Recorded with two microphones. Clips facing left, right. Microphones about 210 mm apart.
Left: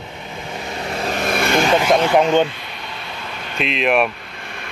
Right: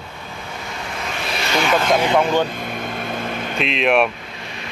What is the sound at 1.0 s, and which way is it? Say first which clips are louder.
Vehicle: left 7 dB; 45° left (ahead or behind).